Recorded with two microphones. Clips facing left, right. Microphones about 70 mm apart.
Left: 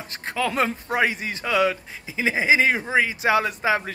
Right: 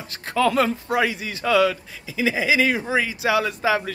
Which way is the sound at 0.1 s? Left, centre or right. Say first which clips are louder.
Right 5 dB; left.